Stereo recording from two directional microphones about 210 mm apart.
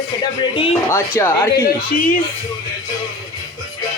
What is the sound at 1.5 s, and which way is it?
Speech, 45° left (ahead or behind).